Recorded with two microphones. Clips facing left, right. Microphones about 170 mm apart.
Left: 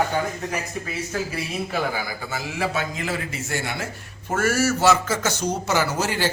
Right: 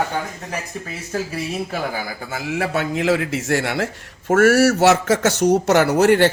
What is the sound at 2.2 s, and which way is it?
A man's voice, 55° right (ahead or behind).